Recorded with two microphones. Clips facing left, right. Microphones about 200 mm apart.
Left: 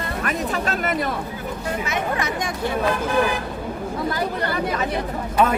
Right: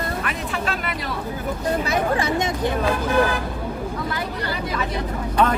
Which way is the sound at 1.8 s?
30° right (ahead or behind).